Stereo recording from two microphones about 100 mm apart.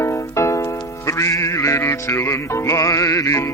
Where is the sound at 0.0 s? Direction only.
30° left (ahead or behind).